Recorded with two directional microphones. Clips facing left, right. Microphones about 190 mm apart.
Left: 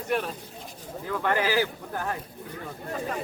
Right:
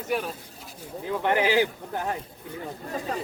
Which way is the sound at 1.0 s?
20° right (ahead or behind).